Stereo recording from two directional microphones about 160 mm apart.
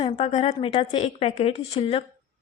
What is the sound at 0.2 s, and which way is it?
A woman's voice, 45° left (ahead or behind).